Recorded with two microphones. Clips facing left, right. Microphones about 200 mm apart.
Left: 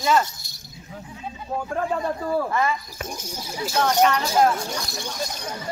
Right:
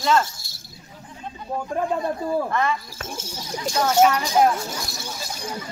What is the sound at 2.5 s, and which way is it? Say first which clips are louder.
Speech: even; 10° left (ahead or behind).